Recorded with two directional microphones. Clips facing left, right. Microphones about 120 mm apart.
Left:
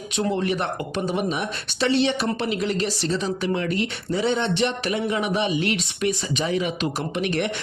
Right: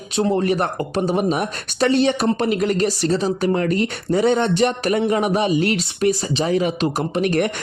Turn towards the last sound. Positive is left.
turn(degrees=-45)  # may be behind; listen again after turning